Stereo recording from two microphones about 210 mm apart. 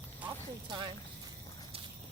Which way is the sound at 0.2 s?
5° right (ahead or behind).